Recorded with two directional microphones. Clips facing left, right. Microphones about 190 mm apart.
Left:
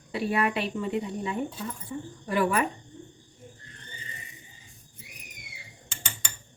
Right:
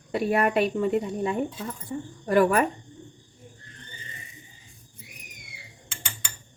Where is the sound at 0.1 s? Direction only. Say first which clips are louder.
Right 4 dB; 50° right (ahead or behind).